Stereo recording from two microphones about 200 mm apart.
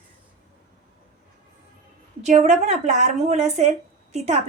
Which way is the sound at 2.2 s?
35° right (ahead or behind).